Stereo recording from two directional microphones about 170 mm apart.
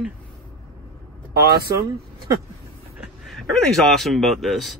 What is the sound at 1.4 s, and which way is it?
Speech, 65° right (ahead or behind).